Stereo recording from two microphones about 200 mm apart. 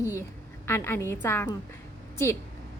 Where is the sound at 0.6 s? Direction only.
10° left (ahead or behind).